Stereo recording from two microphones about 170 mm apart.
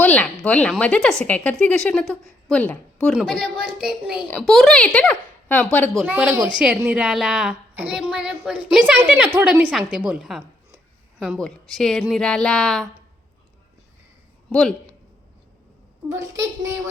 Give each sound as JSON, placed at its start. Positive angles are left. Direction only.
{"t": 0.0, "sound": "a woman's voice", "side_deg": 10}
{"t": 6.1, "sound": "a woman's voice", "side_deg": -10}
{"t": 14.5, "sound": "a woman's voice", "side_deg": 5}
{"t": 16.0, "sound": "a woman's voice", "side_deg": -20}